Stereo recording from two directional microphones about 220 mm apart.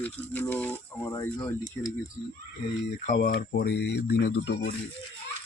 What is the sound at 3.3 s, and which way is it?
Speech, 45° left (ahead or behind).